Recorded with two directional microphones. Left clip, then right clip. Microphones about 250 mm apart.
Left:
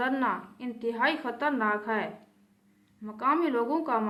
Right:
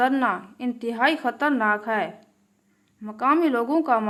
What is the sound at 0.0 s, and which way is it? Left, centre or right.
A woman's voice, right.